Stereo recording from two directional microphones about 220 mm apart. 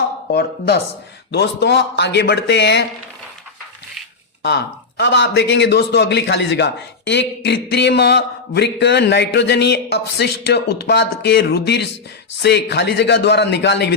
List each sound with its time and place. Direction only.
0.3 s a man's voice: 45° left (ahead or behind)
4.4 s a man's voice: 50° left (ahead or behind)